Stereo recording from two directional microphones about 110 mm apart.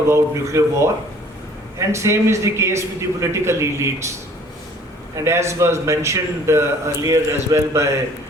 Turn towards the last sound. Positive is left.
turn(degrees=-25)  # may be behind; listen again after turning